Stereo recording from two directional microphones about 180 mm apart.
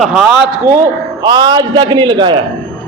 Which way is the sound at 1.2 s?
25° right (ahead or behind).